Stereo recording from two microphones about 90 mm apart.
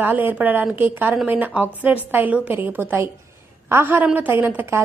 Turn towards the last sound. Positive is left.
turn(degrees=-20)  # may be behind; listen again after turning